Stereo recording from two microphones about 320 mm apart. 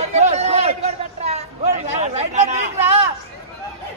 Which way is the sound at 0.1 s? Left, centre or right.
Right.